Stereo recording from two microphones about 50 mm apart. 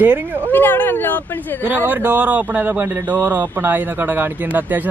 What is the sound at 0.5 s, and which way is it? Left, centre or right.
Speech, left.